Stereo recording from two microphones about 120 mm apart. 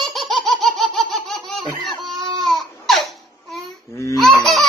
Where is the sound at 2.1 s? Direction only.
40° right (ahead or behind).